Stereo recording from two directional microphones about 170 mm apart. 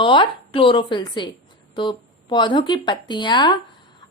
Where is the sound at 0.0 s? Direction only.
30° left (ahead or behind).